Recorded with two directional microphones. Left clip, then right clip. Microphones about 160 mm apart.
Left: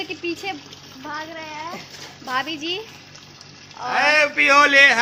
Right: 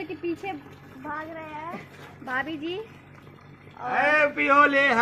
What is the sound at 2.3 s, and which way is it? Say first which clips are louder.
Speech: left 5 dB; 25° left (ahead or behind).